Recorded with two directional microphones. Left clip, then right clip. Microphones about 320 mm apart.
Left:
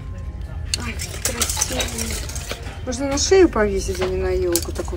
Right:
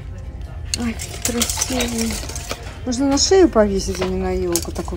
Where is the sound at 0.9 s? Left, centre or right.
Centre.